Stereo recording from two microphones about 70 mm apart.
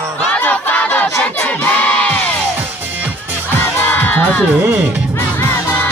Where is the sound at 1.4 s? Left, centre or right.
Left.